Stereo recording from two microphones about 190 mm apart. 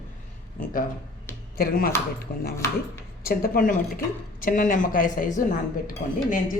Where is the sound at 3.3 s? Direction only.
50° left (ahead or behind).